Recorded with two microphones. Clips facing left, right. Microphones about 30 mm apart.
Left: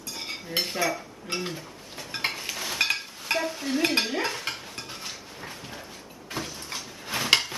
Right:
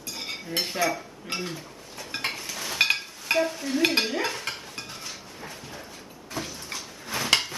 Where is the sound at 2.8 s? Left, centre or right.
Centre.